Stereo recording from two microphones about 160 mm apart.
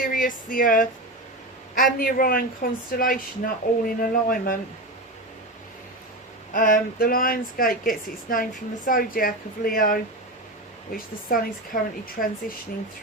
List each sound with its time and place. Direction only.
0.0 s speech: 60° left (ahead or behind)
6.5 s speech: 55° left (ahead or behind)